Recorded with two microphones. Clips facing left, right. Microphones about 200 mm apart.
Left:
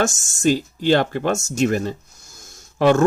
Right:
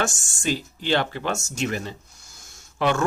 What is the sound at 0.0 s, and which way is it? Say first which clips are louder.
Speech: left 7 dB; 45° left (ahead or behind).